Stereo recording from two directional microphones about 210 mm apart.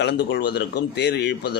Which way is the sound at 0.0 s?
55° left (ahead or behind).